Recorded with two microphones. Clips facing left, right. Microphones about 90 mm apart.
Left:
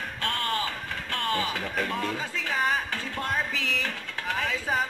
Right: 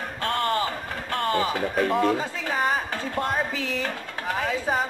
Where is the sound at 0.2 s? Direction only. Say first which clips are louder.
Right 5 dB; 35° right (ahead or behind).